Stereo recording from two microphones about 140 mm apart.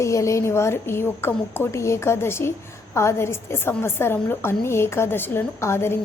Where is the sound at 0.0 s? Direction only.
20° left (ahead or behind).